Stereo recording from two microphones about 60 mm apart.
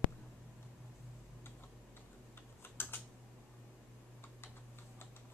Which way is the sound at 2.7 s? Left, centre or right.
Left.